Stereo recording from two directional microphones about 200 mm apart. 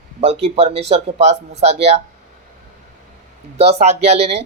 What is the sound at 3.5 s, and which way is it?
Speech, 30° right (ahead or behind).